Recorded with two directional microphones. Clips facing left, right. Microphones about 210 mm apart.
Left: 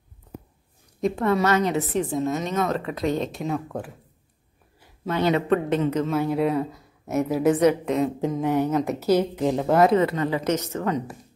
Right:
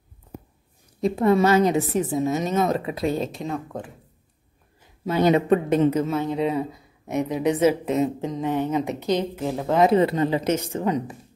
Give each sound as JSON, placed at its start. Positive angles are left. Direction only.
{"t": 1.0, "sound": "a woman's voice", "side_deg": -10}
{"t": 5.0, "sound": "speech", "side_deg": -10}
{"t": 6.1, "sound": "a woman's voice", "side_deg": 5}
{"t": 8.2, "sound": "a woman's voice", "side_deg": 10}
{"t": 9.8, "sound": "a woman's voice", "side_deg": -25}